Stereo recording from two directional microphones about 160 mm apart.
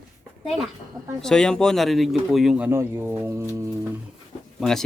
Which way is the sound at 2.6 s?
15° right (ahead or behind).